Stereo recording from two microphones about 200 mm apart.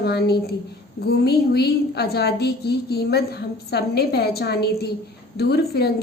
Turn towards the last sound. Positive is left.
turn(degrees=55)  # may be behind; listen again after turning